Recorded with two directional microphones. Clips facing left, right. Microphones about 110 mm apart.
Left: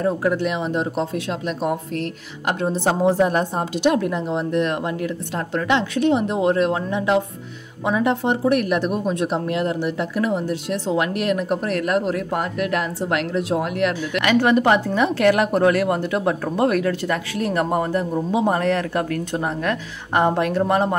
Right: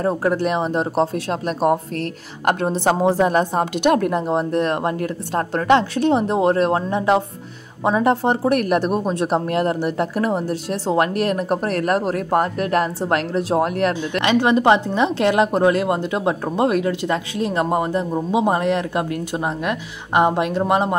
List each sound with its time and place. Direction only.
0.0 s speech: 40° right (ahead or behind)
2.7 s a woman's voice: 90° right
3.8 s speech: 55° right (ahead or behind)
14.2 s speech: 20° right (ahead or behind)